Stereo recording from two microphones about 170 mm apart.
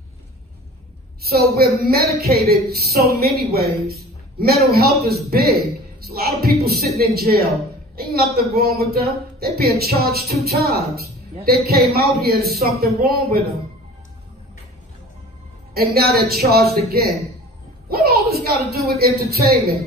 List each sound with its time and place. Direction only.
1.6 s speech: 65° right (ahead or behind)
15.7 s speech: 65° right (ahead or behind)